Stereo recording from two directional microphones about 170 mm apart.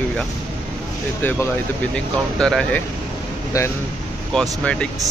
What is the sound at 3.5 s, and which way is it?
Speech, 20° left (ahead or behind).